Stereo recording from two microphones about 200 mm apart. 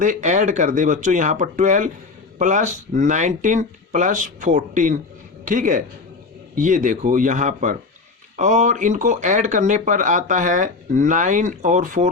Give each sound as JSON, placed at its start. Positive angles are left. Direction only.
{"t": 0.0, "sound": "speech", "side_deg": -40}